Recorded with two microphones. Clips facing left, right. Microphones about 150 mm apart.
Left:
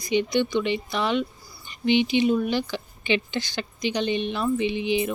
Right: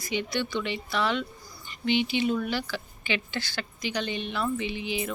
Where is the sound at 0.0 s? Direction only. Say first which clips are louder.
Left 7 dB; 20° left (ahead or behind).